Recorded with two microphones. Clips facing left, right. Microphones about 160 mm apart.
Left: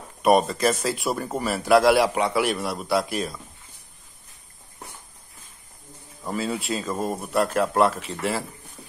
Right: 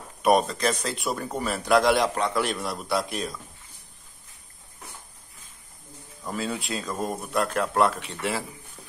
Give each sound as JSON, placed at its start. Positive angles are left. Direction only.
{"t": 0.2, "sound": "speech", "side_deg": 0}
{"t": 6.2, "sound": "speech", "side_deg": 0}